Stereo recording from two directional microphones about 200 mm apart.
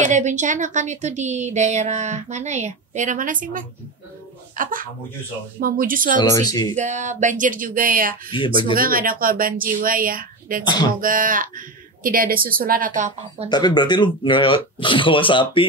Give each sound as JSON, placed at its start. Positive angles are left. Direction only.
{"t": 0.0, "sound": "a woman's voice", "side_deg": -35}
{"t": 6.1, "sound": "speech", "side_deg": 20}
{"t": 6.7, "sound": "a woman's voice", "side_deg": -35}
{"t": 13.5, "sound": "speech", "side_deg": 20}